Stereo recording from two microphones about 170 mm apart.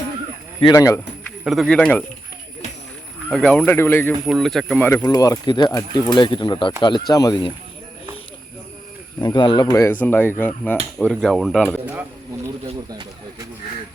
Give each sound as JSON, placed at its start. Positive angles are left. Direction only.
{"t": 0.6, "sound": "speech", "side_deg": 20}
{"t": 1.5, "sound": "speech", "side_deg": 0}
{"t": 3.2, "sound": "speech", "side_deg": 5}
{"t": 4.3, "sound": "speech", "side_deg": 0}
{"t": 4.9, "sound": "speech", "side_deg": 20}
{"t": 9.2, "sound": "speech", "side_deg": 25}
{"t": 12.9, "sound": "speech", "side_deg": -20}